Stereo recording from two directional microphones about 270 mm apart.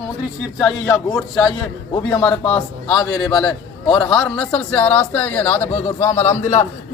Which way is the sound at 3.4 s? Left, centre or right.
Centre.